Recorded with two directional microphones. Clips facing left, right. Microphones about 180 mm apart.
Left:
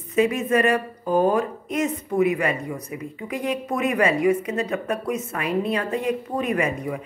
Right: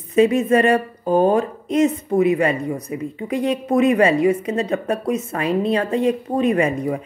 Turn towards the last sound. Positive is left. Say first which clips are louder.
# right 5 dB
turn(degrees=-30)  # may be behind; listen again after turning